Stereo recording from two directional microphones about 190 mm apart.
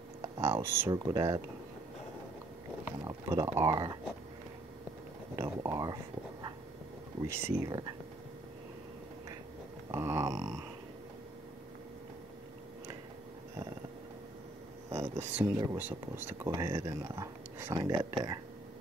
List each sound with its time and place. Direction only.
0.2 s speech: 15° right (ahead or behind)
3.0 s speech: 20° right (ahead or behind)
5.3 s speech: 15° right (ahead or behind)
7.2 s speech: 15° right (ahead or behind)
9.8 s speech: 15° right (ahead or behind)
14.9 s speech: 15° right (ahead or behind)